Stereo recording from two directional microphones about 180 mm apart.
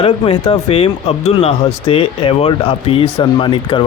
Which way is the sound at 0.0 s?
35° left (ahead or behind).